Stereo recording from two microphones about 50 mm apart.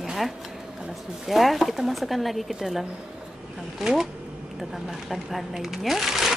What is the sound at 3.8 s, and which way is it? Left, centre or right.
Speech, centre.